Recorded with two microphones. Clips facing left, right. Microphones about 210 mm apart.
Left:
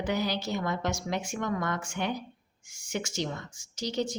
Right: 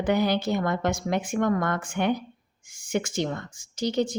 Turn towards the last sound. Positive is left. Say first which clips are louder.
# right 6 dB
turn(degrees=-55)  # may be behind; listen again after turning